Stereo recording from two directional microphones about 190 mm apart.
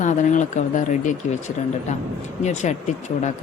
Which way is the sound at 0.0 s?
40° left (ahead or behind).